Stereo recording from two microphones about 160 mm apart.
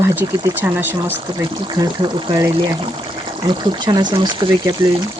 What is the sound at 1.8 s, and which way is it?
Speech, 30° right (ahead or behind).